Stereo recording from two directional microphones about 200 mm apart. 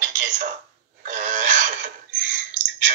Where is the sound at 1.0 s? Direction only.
40° right (ahead or behind).